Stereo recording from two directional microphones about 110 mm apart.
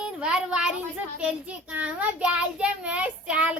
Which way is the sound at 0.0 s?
10° right (ahead or behind).